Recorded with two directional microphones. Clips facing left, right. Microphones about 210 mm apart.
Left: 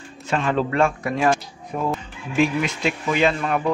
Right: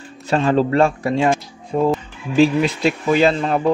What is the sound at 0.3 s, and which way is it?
Speech, 35° right (ahead or behind).